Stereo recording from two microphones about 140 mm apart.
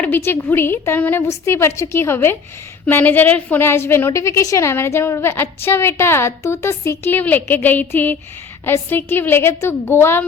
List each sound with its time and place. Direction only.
0.0 s a woman's voice: 15° left (ahead or behind)